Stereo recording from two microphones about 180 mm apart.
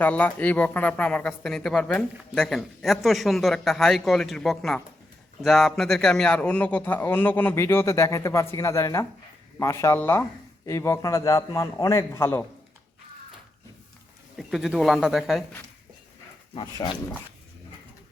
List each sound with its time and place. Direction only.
0.0 s a man's voice: 10° left (ahead or behind)
14.3 s speech: centre (ahead or behind)
16.8 s speech: 25° left (ahead or behind)